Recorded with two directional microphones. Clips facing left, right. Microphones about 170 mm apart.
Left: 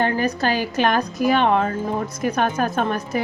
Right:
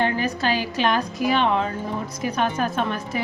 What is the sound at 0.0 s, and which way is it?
A woman's voice, 45° left (ahead or behind).